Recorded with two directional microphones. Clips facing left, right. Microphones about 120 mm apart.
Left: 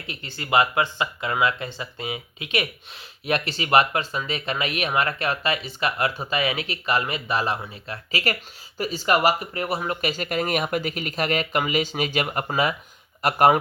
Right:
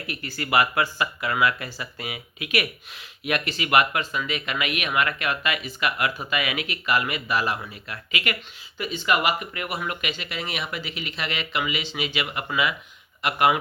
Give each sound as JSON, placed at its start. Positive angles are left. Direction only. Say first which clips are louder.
{"t": 0.1, "sound": "speech", "louder": "left 1 dB", "side_deg": 25}